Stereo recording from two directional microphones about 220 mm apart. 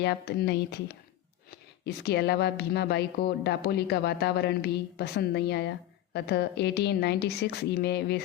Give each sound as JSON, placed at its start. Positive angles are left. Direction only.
{"t": 0.0, "sound": "speech", "side_deg": 50}